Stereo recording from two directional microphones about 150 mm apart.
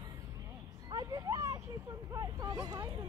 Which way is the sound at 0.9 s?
25° right (ahead or behind).